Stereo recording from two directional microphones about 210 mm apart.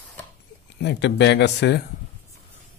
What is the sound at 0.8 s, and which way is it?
Speech, 55° left (ahead or behind).